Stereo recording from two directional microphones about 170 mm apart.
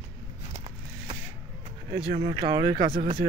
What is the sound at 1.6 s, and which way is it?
Speech, 35° right (ahead or behind).